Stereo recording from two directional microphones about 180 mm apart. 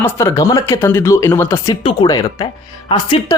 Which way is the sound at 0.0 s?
15° left (ahead or behind).